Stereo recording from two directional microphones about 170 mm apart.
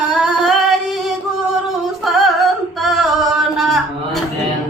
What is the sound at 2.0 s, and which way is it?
Female singing, centre (ahead or behind).